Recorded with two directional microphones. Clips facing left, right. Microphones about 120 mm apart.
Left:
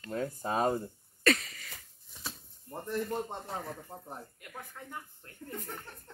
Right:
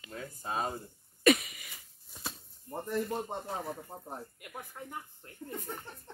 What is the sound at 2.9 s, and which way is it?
Speech, 15° right (ahead or behind).